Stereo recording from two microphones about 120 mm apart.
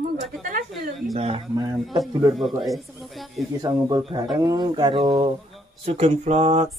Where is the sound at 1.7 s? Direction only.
Centre (ahead or behind).